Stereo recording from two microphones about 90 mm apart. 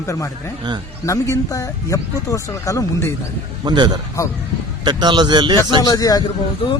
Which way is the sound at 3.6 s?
55° right (ahead or behind).